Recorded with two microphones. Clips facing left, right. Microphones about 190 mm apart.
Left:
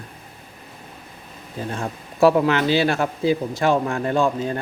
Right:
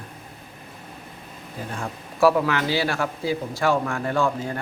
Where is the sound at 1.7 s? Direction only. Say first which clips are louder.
Left 3 dB; 25° left (ahead or behind).